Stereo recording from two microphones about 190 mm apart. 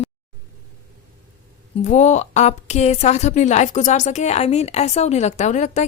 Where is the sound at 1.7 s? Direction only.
40° left (ahead or behind).